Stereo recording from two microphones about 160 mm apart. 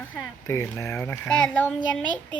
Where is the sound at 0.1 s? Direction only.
15° left (ahead or behind).